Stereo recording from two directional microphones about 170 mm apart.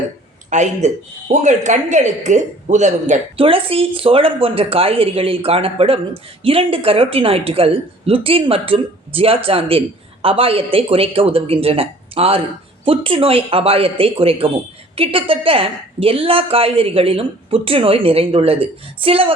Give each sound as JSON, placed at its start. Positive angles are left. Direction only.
{"t": 0.5, "sound": "speech", "side_deg": -45}